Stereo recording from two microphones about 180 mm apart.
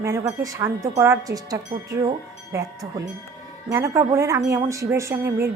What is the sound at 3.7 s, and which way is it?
Speech, 15° right (ahead or behind).